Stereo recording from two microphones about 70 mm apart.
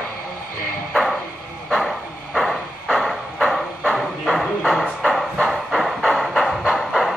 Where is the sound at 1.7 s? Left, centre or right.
Centre.